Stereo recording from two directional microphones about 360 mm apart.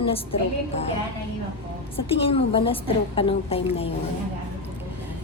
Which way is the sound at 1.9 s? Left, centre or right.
Centre.